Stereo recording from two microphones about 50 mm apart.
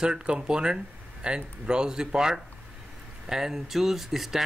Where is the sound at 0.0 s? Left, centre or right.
Centre.